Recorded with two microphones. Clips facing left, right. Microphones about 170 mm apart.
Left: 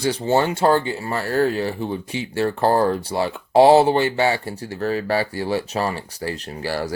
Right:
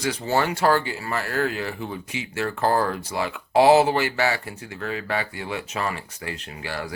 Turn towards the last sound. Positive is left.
turn(degrees=35)  # may be behind; listen again after turning